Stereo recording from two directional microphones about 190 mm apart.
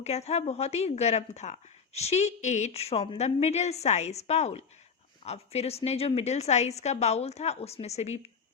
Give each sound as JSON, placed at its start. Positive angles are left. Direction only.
{"t": 0.0, "sound": "speech", "side_deg": 35}